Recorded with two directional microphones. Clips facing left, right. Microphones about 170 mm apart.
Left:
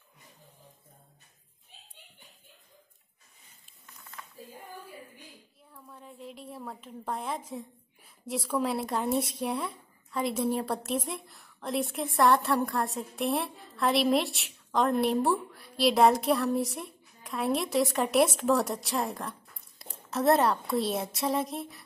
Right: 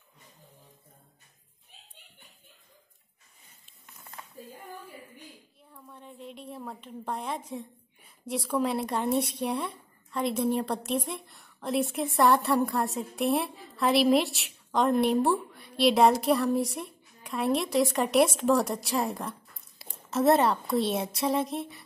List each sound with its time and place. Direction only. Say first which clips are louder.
5.7 s a woman's voice: right 1 dB; centre (ahead or behind)